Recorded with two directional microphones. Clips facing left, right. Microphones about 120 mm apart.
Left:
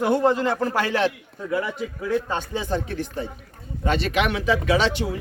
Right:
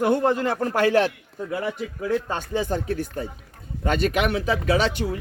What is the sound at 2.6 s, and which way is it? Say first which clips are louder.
Speech: right 4 dB; 40° right (ahead or behind).